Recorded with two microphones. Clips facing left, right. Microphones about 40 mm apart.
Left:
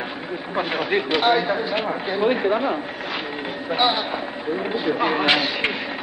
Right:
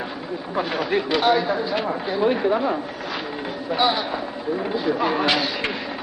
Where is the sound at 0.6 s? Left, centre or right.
Left.